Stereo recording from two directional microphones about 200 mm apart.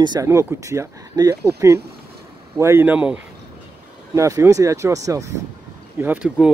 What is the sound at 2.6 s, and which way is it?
Speech, 10° right (ahead or behind).